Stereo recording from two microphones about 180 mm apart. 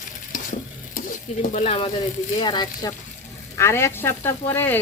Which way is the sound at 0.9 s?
45° left (ahead or behind).